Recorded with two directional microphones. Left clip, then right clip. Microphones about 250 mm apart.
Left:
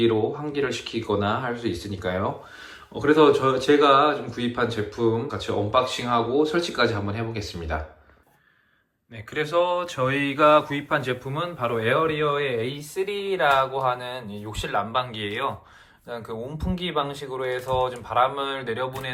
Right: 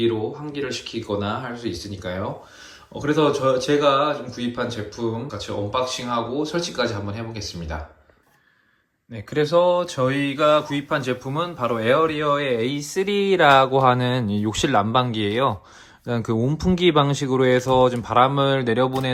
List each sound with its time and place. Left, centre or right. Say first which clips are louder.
0.0 s speech: left 1 dB; centre
9.1 s speech: right 4 dB; centre